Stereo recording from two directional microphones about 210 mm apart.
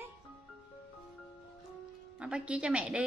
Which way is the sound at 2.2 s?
5° right (ahead or behind).